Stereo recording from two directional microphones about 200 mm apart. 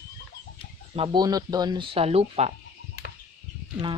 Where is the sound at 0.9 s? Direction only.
25° right (ahead or behind).